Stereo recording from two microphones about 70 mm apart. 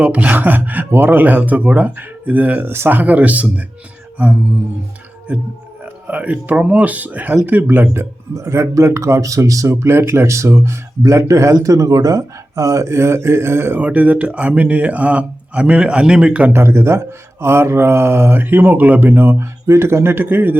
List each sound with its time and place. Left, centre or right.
0.0 s speech: centre
5.3 s speech: right
8.4 s speech: right
13.7 s speech: right
16.5 s speech: right